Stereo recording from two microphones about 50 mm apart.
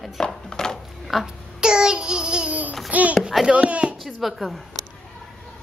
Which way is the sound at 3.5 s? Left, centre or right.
Right.